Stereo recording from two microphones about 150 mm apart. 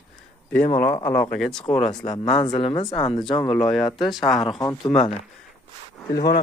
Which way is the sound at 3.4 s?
5° left (ahead or behind).